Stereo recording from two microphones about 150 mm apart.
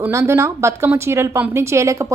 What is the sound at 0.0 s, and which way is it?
A woman's voice, 20° right (ahead or behind).